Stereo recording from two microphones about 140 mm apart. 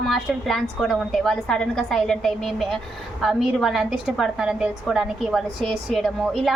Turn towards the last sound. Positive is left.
turn(degrees=0)  # may be behind; listen again after turning